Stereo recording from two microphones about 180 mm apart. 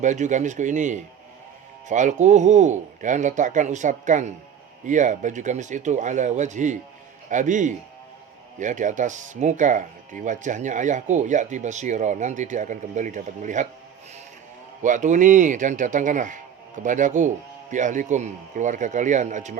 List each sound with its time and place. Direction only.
0.0 s speech: 40° right (ahead or behind)
14.8 s speech: 45° right (ahead or behind)